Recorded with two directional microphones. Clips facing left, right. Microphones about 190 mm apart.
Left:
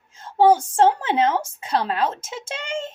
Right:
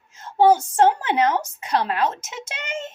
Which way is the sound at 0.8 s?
25° left (ahead or behind).